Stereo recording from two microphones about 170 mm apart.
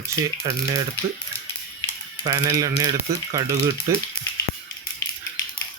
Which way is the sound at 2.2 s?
25° right (ahead or behind).